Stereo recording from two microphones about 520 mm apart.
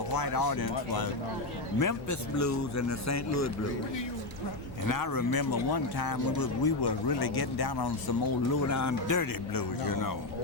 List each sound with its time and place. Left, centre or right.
0.1 s speech: left
4.9 s speech: left
8.6 s speech: left